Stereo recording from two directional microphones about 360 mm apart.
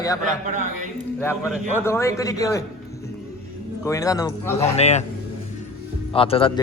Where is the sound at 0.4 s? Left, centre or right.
Centre.